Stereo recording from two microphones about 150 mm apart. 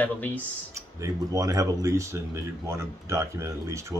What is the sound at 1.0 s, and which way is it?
Speech, 25° right (ahead or behind).